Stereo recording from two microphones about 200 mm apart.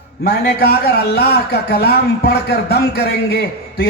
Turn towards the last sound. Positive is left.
turn(degrees=50)  # may be behind; listen again after turning